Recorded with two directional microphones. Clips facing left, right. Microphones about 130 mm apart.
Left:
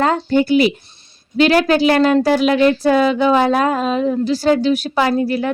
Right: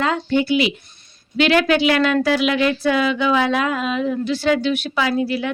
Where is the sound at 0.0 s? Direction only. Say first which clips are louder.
Left 4 dB; 40° left (ahead or behind).